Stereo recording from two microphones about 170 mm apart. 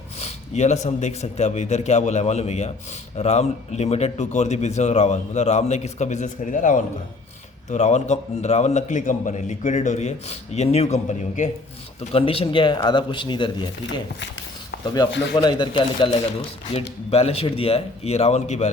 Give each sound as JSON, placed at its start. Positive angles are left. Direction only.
{"t": 0.2, "sound": "a man's voice", "side_deg": 40}
{"t": 15.4, "sound": "speech", "side_deg": 25}
{"t": 16.7, "sound": "a man's voice", "side_deg": 35}